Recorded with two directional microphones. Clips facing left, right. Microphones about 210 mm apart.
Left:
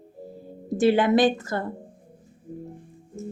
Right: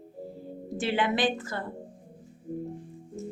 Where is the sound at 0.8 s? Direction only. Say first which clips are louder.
Left 8 dB; 40° left (ahead or behind).